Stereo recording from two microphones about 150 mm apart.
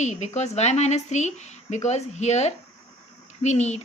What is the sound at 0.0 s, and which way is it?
A woman's voice, 50° left (ahead or behind).